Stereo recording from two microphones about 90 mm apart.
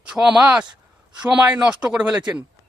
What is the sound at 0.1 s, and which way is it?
Speech, 5° right (ahead or behind).